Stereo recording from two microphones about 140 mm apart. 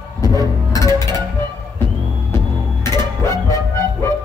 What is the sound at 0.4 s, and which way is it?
Music, 25° right (ahead or behind).